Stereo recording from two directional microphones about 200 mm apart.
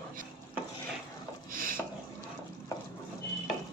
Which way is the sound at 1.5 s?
45° right (ahead or behind).